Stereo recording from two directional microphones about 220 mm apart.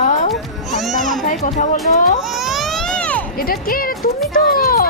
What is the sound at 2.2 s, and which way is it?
Baby cry, centre (ahead or behind).